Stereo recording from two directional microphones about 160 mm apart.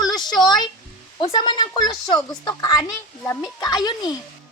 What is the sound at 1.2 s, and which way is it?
Speech, 30° left (ahead or behind).